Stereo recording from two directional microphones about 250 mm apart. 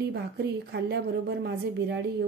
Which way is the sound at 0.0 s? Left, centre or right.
Right.